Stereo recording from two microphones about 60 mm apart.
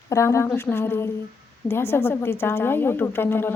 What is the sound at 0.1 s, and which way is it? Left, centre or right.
Speech, left.